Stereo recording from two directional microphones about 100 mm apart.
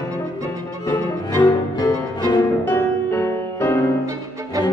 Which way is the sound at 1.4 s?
45° left (ahead or behind).